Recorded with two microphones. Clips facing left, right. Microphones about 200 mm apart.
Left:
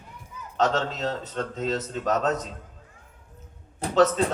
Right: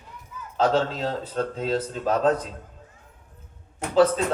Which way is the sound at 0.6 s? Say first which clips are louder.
Right 2 dB; 30° right (ahead or behind).